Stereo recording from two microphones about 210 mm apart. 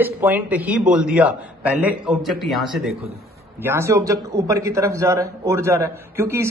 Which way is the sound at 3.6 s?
10° right (ahead or behind).